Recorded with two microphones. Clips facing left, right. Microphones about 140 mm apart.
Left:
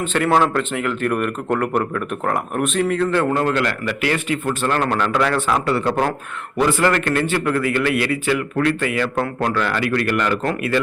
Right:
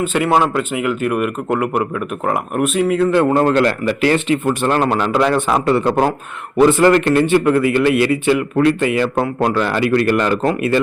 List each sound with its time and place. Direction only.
0.0 s speech: 10° right (ahead or behind)
3.3 s speech: 30° right (ahead or behind)